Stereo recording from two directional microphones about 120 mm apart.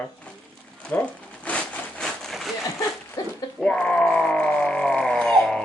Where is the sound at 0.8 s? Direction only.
10° left (ahead or behind).